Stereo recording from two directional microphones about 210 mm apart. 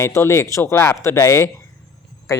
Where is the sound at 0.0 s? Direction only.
15° left (ahead or behind).